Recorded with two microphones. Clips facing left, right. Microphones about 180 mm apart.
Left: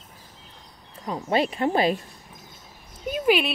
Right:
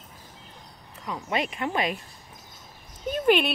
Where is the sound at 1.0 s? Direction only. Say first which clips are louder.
Left 5 dB; 35° left (ahead or behind).